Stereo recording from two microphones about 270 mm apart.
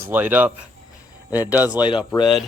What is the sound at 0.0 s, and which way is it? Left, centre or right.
Speech, centre.